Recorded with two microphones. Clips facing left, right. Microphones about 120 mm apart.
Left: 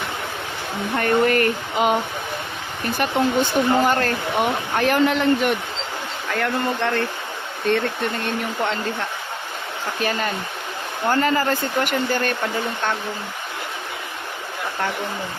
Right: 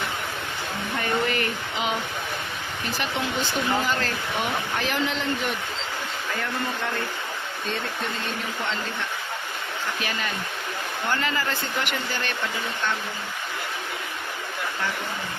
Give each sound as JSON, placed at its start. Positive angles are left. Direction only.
{"t": 0.9, "sound": "speech", "side_deg": 55}
{"t": 6.3, "sound": "speech", "side_deg": 80}
{"t": 7.7, "sound": "speech", "side_deg": 60}
{"t": 10.0, "sound": "speech", "side_deg": 40}